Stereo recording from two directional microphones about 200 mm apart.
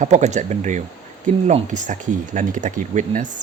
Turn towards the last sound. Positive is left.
turn(degrees=-40)  # may be behind; listen again after turning